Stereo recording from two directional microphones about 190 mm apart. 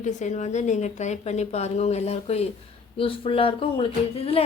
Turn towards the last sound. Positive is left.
turn(degrees=30)  # may be behind; listen again after turning